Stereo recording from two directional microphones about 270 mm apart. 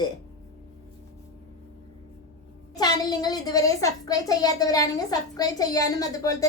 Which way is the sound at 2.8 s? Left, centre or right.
Centre.